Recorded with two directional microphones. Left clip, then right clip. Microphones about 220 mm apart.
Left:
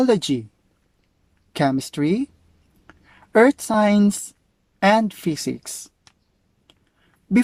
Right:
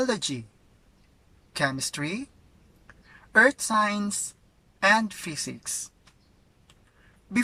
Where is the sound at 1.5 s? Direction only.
40° left (ahead or behind).